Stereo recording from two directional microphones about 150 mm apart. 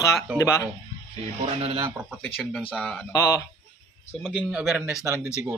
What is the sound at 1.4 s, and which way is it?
Speech, 40° right (ahead or behind).